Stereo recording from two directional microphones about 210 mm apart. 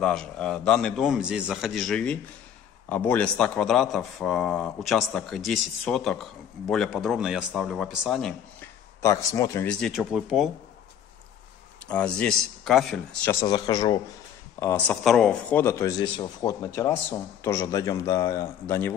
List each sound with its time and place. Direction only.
0.0 s a man's voice: 5° left (ahead or behind)
9.0 s a man's voice: 15° left (ahead or behind); by 10.5 s centre (ahead or behind)
11.9 s a man's voice: 5° left (ahead or behind)
13.3 s speech: 15° left (ahead or behind)
14.6 s a man's voice: 10° left (ahead or behind)